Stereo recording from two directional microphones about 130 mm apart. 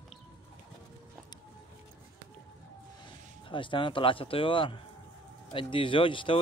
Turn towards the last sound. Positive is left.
turn(degrees=40)  # may be behind; listen again after turning